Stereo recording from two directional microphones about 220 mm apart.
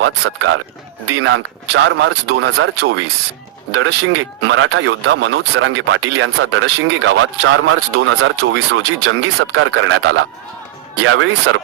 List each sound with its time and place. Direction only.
0.0 s speech: 60° right (ahead or behind)